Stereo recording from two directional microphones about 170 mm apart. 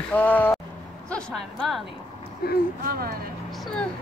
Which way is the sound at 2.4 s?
65° left (ahead or behind).